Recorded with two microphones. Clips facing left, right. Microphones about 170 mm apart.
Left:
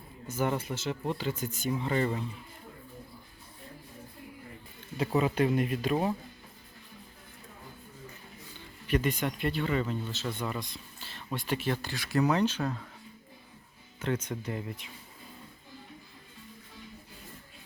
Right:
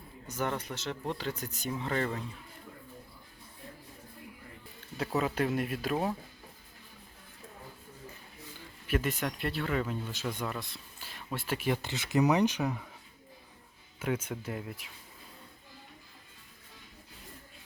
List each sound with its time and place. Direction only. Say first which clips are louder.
0.3 s speech: left 3 dB; 5° left (ahead or behind)
4.9 s speech: left 3 dB; centre (ahead or behind)
8.9 s speech: left 3 dB; 5° right (ahead or behind)
11.8 s speech: even; 20° right (ahead or behind)
14.0 s speech: left 1 dB; 10° right (ahead or behind)